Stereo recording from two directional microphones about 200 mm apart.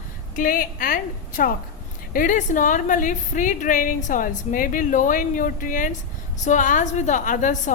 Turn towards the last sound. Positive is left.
turn(degrees=40)  # may be behind; listen again after turning